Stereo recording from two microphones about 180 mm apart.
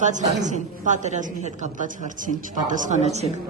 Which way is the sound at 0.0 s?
45° right (ahead or behind).